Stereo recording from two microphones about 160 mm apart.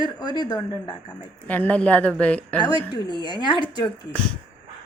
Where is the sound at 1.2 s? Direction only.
10° left (ahead or behind).